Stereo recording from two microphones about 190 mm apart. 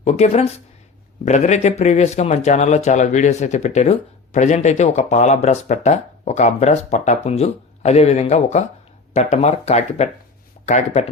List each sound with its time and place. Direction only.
0.0 s speech: 35° left (ahead or behind)